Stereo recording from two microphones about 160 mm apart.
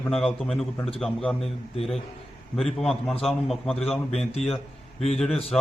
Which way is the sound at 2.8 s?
5° left (ahead or behind).